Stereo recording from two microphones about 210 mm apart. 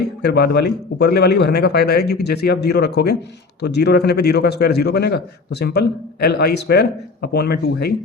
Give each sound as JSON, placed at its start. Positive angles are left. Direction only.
{"t": 0.0, "sound": "a man's voice", "side_deg": 50}